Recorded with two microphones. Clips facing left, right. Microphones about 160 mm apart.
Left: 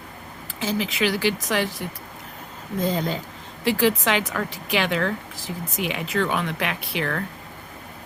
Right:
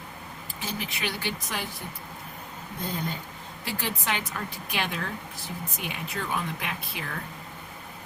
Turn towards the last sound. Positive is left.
turn(degrees=80)